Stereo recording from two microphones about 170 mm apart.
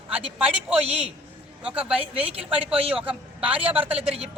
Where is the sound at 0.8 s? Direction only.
35° right (ahead or behind).